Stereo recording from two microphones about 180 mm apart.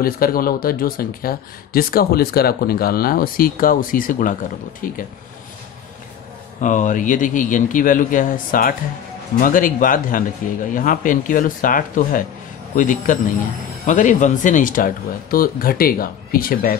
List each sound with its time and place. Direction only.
0.0 s speech: 55° left (ahead or behind)
6.6 s speech: 45° left (ahead or behind)